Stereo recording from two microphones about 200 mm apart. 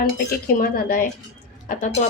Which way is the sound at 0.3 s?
50° left (ahead or behind).